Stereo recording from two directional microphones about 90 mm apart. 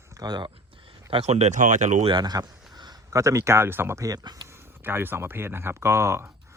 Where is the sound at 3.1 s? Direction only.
35° right (ahead or behind).